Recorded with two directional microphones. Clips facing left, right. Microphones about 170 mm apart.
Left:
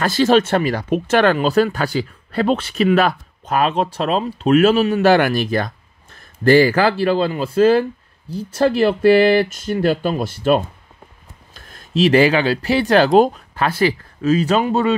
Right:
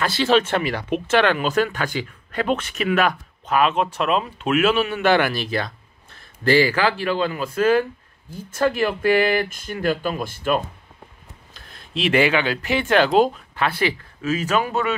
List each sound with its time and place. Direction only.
0.0 s speech: 45° left (ahead or behind)
11.5 s speech: 45° left (ahead or behind)